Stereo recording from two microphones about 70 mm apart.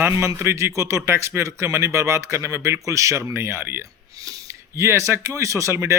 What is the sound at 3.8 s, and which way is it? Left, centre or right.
A man's voice, right.